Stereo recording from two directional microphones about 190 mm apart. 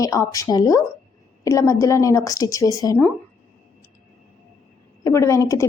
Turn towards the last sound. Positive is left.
turn(degrees=15)  # may be behind; listen again after turning